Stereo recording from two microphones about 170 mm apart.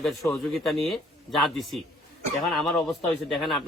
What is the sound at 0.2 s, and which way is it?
Speech, 15° left (ahead or behind).